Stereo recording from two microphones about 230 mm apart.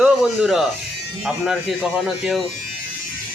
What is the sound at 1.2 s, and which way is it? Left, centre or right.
Speech, centre.